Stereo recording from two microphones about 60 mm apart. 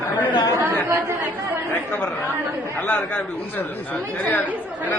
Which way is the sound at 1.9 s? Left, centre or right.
Left.